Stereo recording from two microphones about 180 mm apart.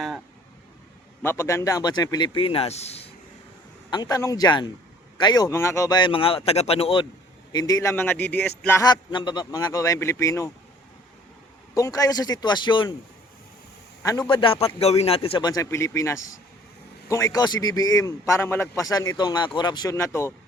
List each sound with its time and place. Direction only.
1.2 s a man's voice: 15° left (ahead or behind); by 3.1 s 35° left (ahead or behind)
3.8 s a man's voice: 25° left (ahead or behind)
7.5 s a man's voice: 20° left (ahead or behind)
11.7 s a man's voice: 20° left (ahead or behind)
14.0 s a man's voice: 20° left (ahead or behind)